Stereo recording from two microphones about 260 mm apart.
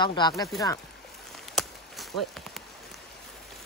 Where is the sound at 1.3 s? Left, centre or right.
Centre.